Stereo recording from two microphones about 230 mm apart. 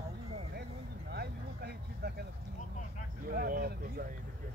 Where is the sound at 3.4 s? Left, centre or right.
Right.